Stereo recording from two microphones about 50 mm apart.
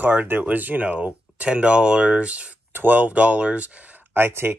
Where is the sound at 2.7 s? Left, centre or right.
Right.